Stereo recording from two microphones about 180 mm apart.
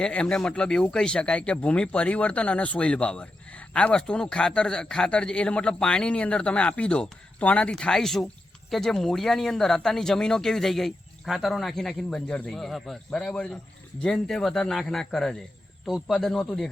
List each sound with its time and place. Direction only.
0.0 s speech: 5° left (ahead or behind)